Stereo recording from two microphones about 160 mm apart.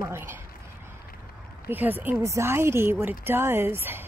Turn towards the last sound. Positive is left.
turn(degrees=-15)  # may be behind; listen again after turning